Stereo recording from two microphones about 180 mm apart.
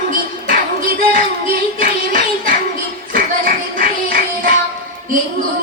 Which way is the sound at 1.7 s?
50° right (ahead or behind).